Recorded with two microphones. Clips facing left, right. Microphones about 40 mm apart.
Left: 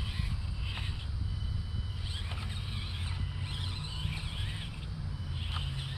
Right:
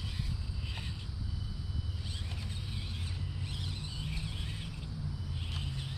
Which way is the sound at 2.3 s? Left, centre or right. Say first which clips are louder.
Left 2 dB; left.